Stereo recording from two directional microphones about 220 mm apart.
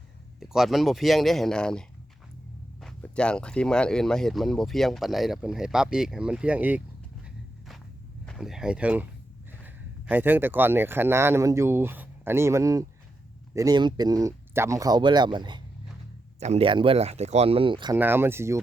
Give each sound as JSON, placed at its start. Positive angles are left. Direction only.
{"t": 0.3, "sound": "speech", "side_deg": 0}
{"t": 2.8, "sound": "speech", "side_deg": 5}
{"t": 8.3, "sound": "speech", "side_deg": 0}
{"t": 17.9, "sound": "speech", "side_deg": -10}